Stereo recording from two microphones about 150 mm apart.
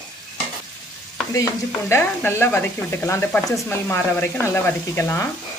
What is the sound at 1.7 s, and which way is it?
Speech, 15° left (ahead or behind).